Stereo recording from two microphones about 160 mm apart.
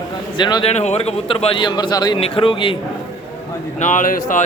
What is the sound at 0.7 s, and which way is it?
A man's voice, 45° left (ahead or behind).